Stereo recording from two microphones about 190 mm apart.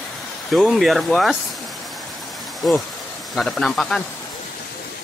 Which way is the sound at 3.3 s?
Centre (ahead or behind).